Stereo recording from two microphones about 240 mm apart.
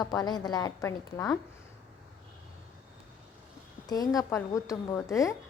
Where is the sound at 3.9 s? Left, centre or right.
Centre.